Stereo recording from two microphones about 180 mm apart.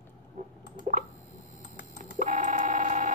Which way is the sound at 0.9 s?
45° right (ahead or behind).